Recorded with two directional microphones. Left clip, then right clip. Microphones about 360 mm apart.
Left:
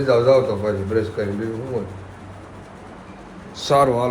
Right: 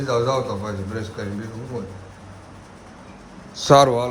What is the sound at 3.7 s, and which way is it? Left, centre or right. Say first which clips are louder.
Speech: right 3 dB; right.